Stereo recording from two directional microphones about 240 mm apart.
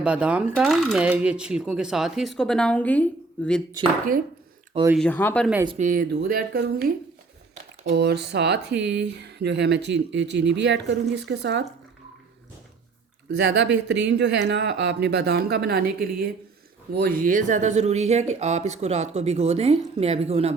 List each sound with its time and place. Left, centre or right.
0.0 s speech: centre
4.9 s speech: centre
5.6 s speech: right
13.3 s speech: right